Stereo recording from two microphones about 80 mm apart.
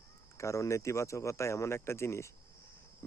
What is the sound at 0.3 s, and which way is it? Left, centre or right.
Speech, left.